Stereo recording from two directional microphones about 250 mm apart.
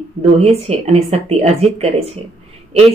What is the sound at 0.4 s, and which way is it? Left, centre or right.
A woman's voice, right.